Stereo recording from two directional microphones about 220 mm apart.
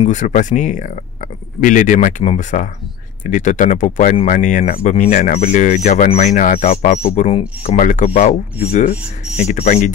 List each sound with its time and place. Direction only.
0.0 s speech: 35° left (ahead or behind)
9.4 s speech: 30° left (ahead or behind)